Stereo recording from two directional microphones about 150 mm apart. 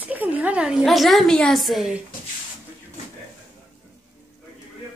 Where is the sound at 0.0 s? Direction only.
10° right (ahead or behind).